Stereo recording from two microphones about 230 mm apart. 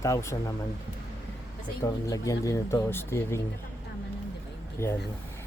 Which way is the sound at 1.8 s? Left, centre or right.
Centre.